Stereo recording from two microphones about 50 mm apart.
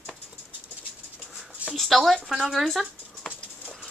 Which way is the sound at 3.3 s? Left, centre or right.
Centre.